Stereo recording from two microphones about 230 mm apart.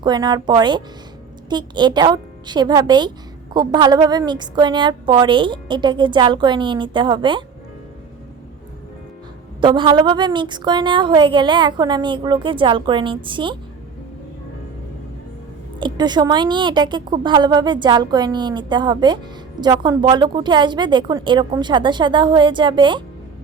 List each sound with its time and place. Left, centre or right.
0.0 s a woman's voice: centre
9.6 s a woman's voice: right
15.8 s a woman's voice: centre